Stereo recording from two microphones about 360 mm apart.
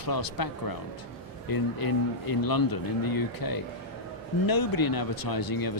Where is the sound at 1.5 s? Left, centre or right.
Left.